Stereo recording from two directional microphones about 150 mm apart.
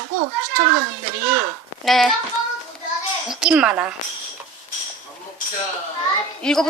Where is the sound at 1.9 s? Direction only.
Centre (ahead or behind).